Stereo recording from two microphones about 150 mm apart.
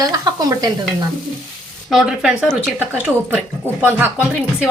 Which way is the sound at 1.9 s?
5° right (ahead or behind).